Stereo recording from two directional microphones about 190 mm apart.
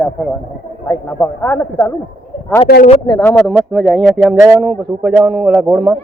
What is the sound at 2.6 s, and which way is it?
Speech, 55° left (ahead or behind).